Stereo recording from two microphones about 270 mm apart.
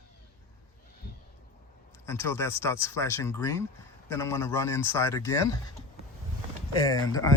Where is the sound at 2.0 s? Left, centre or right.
Centre.